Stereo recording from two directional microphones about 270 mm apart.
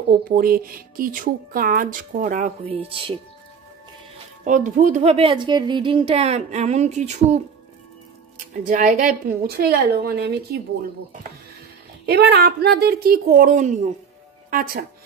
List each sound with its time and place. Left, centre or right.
0.1 s speech: right
4.5 s speech: right
8.6 s speech: right
12.1 s speech: right